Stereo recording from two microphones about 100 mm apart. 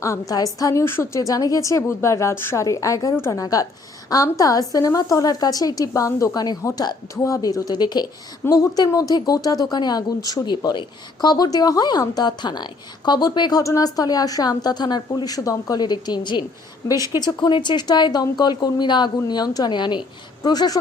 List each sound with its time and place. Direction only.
0.0 s a woman's voice: 35° left (ahead or behind)
13.6 s a woman's voice: 35° left (ahead or behind)